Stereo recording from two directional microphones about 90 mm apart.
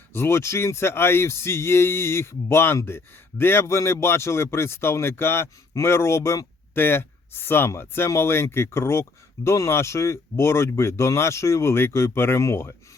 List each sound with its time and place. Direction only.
0.1 s speech: 30° left (ahead or behind)